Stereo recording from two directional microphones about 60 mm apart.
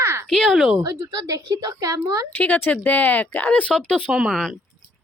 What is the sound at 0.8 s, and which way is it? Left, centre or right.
Speech, right.